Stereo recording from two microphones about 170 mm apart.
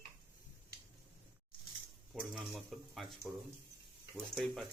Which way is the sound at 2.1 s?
Centre (ahead or behind).